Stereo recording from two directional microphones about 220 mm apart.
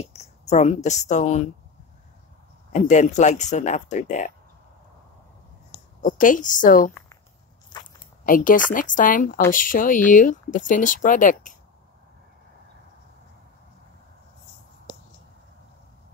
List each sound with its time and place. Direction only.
0.0 s speech: 30° left (ahead or behind)
2.7 s speech: 35° left (ahead or behind)
6.0 s speech: 35° left (ahead or behind)
8.3 s speech: 40° left (ahead or behind)